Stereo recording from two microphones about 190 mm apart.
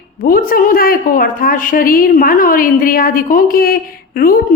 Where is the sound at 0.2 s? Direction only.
50° left (ahead or behind).